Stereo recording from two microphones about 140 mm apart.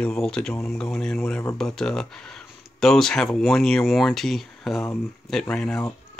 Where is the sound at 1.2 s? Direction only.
15° left (ahead or behind).